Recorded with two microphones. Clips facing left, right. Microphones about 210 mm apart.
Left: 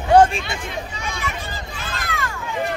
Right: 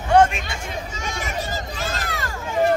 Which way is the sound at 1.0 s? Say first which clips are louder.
Right 1 dB; 45° right (ahead or behind).